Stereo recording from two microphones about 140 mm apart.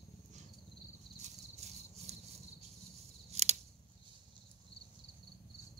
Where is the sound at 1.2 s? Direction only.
55° right (ahead or behind).